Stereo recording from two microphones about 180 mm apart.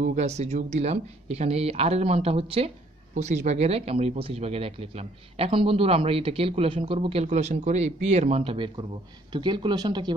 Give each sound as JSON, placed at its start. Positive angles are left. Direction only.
{"t": 0.0, "sound": "speech", "side_deg": -40}